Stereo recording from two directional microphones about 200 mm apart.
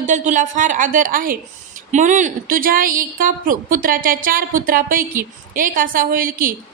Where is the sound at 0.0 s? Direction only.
40° right (ahead or behind).